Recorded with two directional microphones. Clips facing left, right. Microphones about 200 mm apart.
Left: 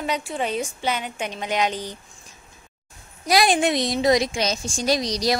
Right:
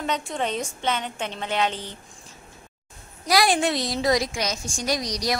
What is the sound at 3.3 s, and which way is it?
A woman's voice, 20° left (ahead or behind).